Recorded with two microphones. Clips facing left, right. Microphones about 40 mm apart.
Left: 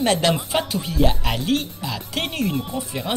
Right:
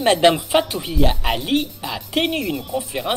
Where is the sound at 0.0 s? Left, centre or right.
Right.